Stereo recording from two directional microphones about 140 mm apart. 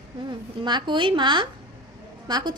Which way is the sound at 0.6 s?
35° right (ahead or behind).